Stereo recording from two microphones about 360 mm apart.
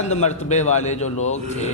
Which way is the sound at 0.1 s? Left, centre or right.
Centre.